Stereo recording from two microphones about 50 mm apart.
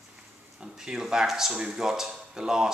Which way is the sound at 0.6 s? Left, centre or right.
Centre.